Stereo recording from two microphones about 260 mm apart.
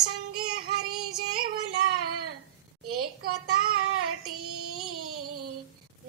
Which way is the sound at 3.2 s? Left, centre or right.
Right.